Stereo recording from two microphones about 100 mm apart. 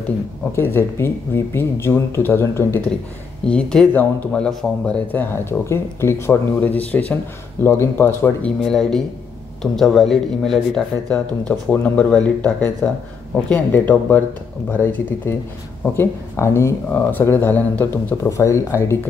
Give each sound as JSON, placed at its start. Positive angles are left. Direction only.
{"t": 0.5, "sound": "speech", "side_deg": 25}
{"t": 3.4, "sound": "speech", "side_deg": 10}
{"t": 8.4, "sound": "speech", "side_deg": 5}
{"t": 16.9, "sound": "speech", "side_deg": 15}
{"t": 18.3, "sound": "speech", "side_deg": 30}